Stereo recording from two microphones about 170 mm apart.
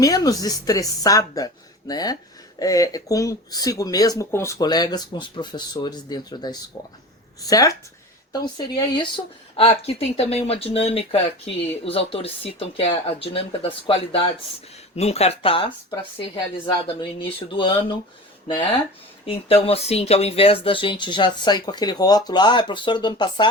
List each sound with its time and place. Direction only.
0.0 s speech: 20° left (ahead or behind)
16.8 s speech: 30° left (ahead or behind)
19.2 s speech: 35° left (ahead or behind)